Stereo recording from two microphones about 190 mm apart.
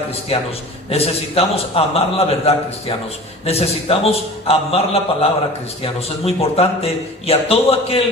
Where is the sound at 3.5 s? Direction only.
30° left (ahead or behind).